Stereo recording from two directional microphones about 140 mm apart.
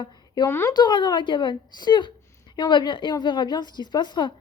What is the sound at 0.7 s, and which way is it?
A woman's voice, 30° left (ahead or behind).